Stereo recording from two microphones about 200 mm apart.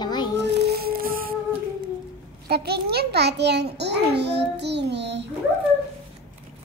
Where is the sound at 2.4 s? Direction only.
55° right (ahead or behind).